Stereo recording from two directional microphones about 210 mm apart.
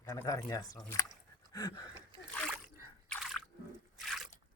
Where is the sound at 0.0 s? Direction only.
15° left (ahead or behind).